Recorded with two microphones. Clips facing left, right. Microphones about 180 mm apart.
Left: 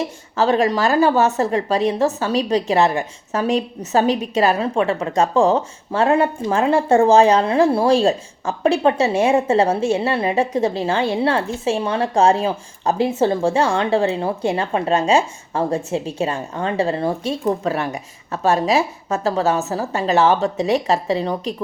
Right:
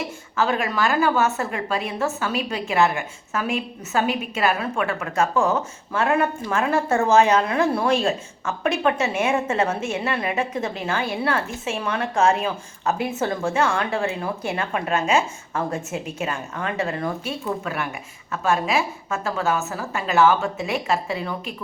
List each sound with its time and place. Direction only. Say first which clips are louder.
0.3 s a woman's voice: left 6 dB; 35° left (ahead or behind)